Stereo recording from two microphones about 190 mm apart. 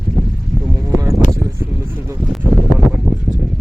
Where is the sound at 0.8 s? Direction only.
20° right (ahead or behind).